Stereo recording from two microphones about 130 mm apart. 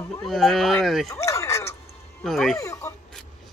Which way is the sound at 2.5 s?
25° left (ahead or behind).